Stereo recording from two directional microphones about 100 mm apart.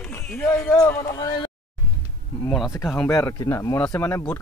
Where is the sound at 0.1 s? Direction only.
20° left (ahead or behind).